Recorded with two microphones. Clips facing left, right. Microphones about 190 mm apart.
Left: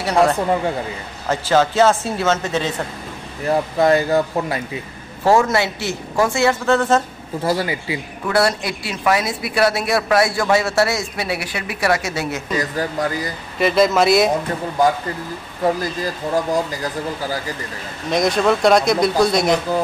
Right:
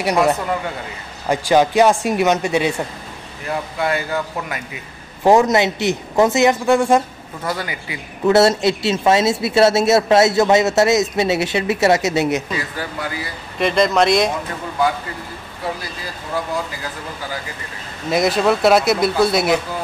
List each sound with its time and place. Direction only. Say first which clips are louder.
0.0 s speech: left 1 dB; 15° right (ahead or behind)
3.4 s speech: left 6 dB; 40° left (ahead or behind)
5.2 s speech: right 3 dB; 20° right (ahead or behind)
7.4 s speech: left 5 dB; 30° left (ahead or behind)
8.3 s speech: right 5 dB; 25° right (ahead or behind)
12.4 s speech: left 4 dB; 40° left (ahead or behind)
13.6 s speech: left 1 dB; 5° left (ahead or behind)
15.6 s speech: left 8 dB; 45° left (ahead or behind)
18.1 s speech: even; 5° right (ahead or behind)